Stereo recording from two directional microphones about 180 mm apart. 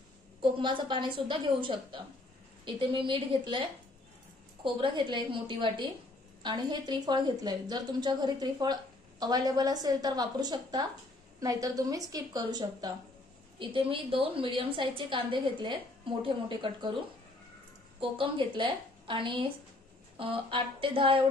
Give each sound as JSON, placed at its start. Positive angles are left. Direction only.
{"t": 0.4, "sound": "a woman's voice", "side_deg": -25}
{"t": 4.7, "sound": "a woman's voice", "side_deg": -25}
{"t": 18.0, "sound": "a woman's voice", "side_deg": -30}